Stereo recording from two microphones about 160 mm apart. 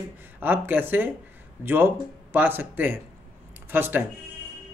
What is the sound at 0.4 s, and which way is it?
Speech, 10° right (ahead or behind).